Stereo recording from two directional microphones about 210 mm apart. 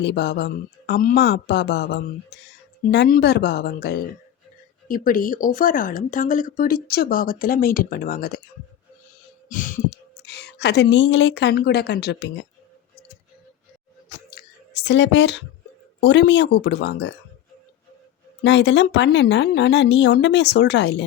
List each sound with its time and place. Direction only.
0.0 s speech: 55° left (ahead or behind)
9.5 s heart sounds: 40° left (ahead or behind)
10.3 s a woman's voice: 55° left (ahead or behind)
14.3 s clicking: 50° left (ahead or behind)
16.0 s a woman's voice: 55° left (ahead or behind)
18.4 s a woman's voice: 60° left (ahead or behind)